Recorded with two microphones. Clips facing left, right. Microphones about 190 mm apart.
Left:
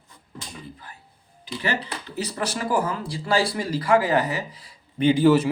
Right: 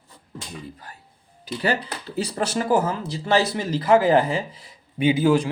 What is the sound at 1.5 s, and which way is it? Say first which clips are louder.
Speech: right 3 dB; 35° right (ahead or behind).